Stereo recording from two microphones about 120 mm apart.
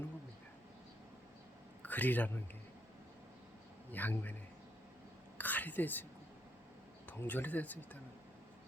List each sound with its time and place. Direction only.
1.8 s a man's voice: 15° left (ahead or behind)
3.9 s speech: 15° left (ahead or behind)
5.4 s whispering: 15° left (ahead or behind)
7.1 s speech: 15° left (ahead or behind)